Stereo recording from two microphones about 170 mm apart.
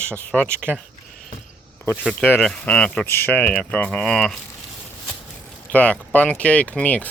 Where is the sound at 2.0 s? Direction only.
5° left (ahead or behind).